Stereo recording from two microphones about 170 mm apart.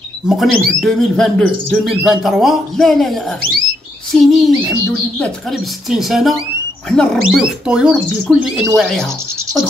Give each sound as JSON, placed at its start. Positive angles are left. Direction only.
{"t": 0.3, "sound": "speech", "side_deg": 0}